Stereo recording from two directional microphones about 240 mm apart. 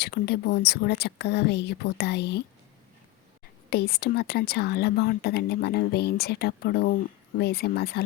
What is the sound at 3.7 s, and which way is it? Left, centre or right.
Speech, left.